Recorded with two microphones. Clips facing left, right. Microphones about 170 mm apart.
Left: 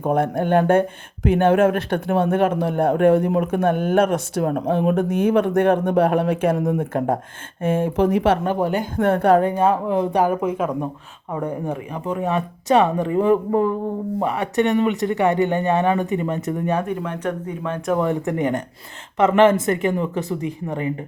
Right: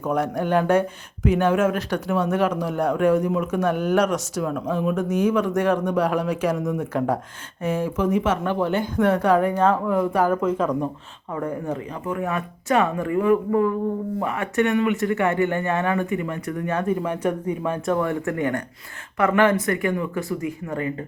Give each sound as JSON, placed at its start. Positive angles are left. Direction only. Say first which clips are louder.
{"t": 0.0, "sound": "speech", "louder": "left 3 dB", "side_deg": 55}
{"t": 8.4, "sound": "speech", "louder": "left 1 dB", "side_deg": 45}
{"t": 9.6, "sound": "speech", "louder": "left 1 dB", "side_deg": 20}
{"t": 16.8, "sound": "speech", "louder": "right 2 dB", "side_deg": -5}
{"t": 17.9, "sound": "speech", "louder": "left 6 dB", "side_deg": 20}